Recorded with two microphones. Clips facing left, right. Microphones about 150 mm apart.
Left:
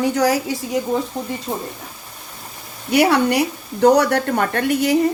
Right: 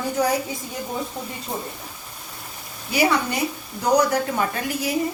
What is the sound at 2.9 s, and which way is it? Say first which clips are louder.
A woman's voice: left 6 dB; 65° left (ahead or behind).